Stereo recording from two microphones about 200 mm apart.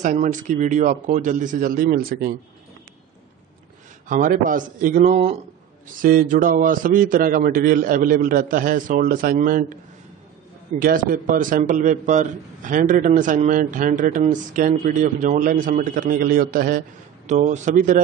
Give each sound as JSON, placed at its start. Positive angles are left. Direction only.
{"t": 0.0, "sound": "a man's voice", "side_deg": -40}
{"t": 4.1, "sound": "a man's voice", "side_deg": -45}
{"t": 10.8, "sound": "a man's voice", "side_deg": -45}